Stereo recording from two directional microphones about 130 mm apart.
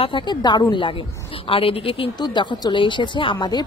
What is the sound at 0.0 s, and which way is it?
A woman's voice, 35° left (ahead or behind).